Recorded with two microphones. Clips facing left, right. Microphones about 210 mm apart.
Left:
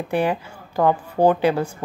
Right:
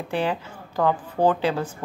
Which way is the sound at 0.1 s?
15° left (ahead or behind).